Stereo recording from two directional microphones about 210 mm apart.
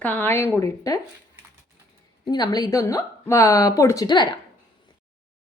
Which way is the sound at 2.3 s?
20° left (ahead or behind).